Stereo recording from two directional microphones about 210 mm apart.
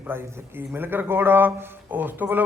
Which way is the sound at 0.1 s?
10° right (ahead or behind).